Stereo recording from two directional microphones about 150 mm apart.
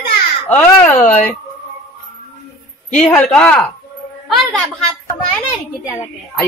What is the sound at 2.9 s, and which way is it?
Speech, 5° left (ahead or behind).